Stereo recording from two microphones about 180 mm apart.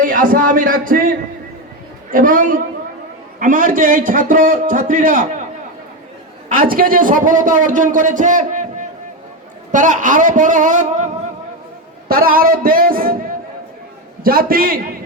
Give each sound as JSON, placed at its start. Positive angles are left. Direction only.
{"t": 0.0, "sound": "a man's voice", "side_deg": -50}
{"t": 2.1, "sound": "a man's voice", "side_deg": -50}
{"t": 6.5, "sound": "a man's voice", "side_deg": -50}
{"t": 9.7, "sound": "a man's voice", "side_deg": -45}
{"t": 14.3, "sound": "a man's voice", "side_deg": -55}